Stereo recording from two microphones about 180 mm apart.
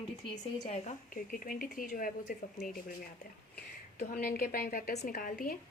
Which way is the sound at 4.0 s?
55° left (ahead or behind).